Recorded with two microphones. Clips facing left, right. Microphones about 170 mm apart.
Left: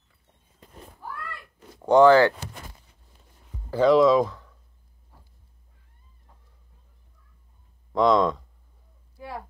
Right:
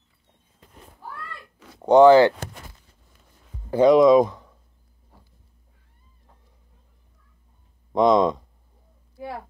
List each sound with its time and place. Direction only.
1.9 s speech: 15° right (ahead or behind)
3.7 s speech: 15° right (ahead or behind)
7.9 s speech: 20° right (ahead or behind)